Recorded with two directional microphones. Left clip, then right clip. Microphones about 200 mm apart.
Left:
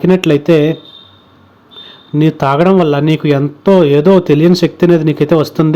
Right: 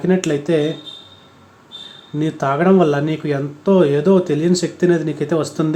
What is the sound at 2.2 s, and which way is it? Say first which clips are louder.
Speech: left 7 dB; 40° left (ahead or behind).